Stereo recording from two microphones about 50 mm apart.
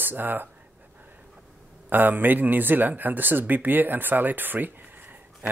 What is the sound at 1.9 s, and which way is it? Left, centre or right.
Speech, right.